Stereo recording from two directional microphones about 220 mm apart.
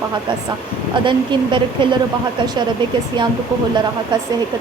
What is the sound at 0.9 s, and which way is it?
Speech, 20° right (ahead or behind).